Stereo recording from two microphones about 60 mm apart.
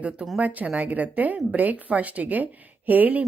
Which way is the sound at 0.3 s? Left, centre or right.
Right.